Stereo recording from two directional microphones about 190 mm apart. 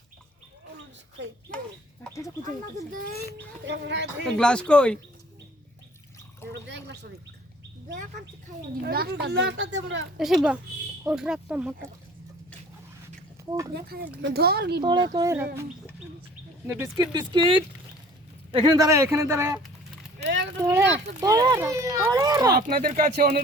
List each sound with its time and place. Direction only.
1.2 s speech: 75° right (ahead or behind)
2.4 s speech: 45° right (ahead or behind)
3.7 s speech: 65° right (ahead or behind)
4.4 s speech: 5° left (ahead or behind)
6.5 s speech: 65° right (ahead or behind)
8.9 s speech: 55° right (ahead or behind); by 10.1 s 75° right (ahead or behind)
10.2 s speech: centre (ahead or behind)
13.7 s speech: 55° right (ahead or behind)
15.0 s speech: 20° right (ahead or behind)
16.6 s speech: 15° right (ahead or behind)
20.2 s a sound: 65° right (ahead or behind)
20.6 s speech: 15° right (ahead or behind)
22.5 s speech: 55° right (ahead or behind)